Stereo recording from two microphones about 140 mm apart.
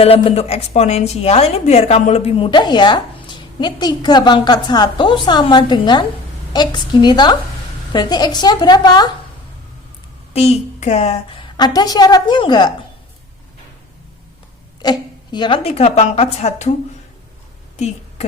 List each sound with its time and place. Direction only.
0.0 s a woman's voice: 45° left (ahead or behind)
10.3 s a woman's voice: 50° left (ahead or behind)
11.5 s a woman's voice: 30° left (ahead or behind)
14.8 s a woman's voice: 30° left (ahead or behind); by 16.7 s 50° left (ahead or behind)
17.7 s a sound: 50° left (ahead or behind)